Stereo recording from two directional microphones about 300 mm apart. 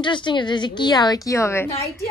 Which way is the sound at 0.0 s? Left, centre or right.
Centre.